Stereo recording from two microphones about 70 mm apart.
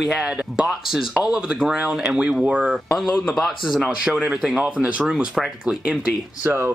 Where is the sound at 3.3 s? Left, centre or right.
Centre.